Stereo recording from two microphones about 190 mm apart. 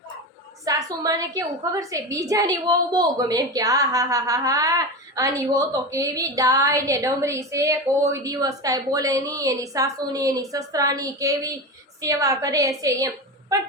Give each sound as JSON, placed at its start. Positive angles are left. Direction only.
{"t": 0.6, "sound": "a woman's voice", "side_deg": -20}